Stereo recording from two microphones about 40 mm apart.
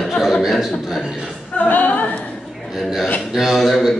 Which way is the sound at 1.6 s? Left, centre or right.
Left.